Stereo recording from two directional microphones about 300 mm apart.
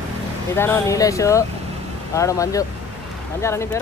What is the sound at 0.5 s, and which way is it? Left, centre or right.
Speech, centre.